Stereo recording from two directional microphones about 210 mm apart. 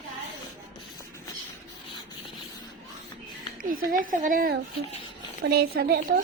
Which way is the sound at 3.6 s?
40° right (ahead or behind).